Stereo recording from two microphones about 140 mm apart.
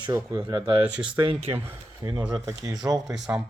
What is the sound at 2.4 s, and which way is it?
Speech, 25° right (ahead or behind).